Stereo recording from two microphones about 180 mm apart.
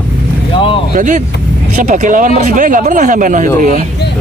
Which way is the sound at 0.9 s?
45° right (ahead or behind).